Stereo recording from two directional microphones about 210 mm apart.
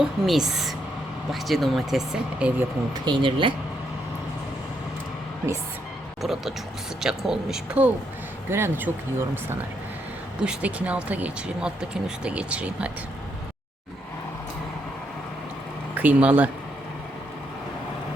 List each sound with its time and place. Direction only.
0.0 s speech: centre (ahead or behind)
2.9 s speech: 20° right (ahead or behind)
6.2 s speech: centre (ahead or behind)
10.4 s speech: 5° right (ahead or behind)
16.0 s speech: 10° right (ahead or behind)